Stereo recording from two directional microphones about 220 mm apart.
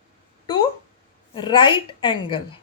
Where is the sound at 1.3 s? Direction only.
20° left (ahead or behind).